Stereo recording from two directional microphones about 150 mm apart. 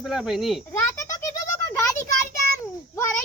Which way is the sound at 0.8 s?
20° left (ahead or behind).